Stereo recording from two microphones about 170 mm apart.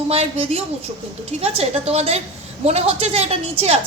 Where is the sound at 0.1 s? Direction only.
35° right (ahead or behind).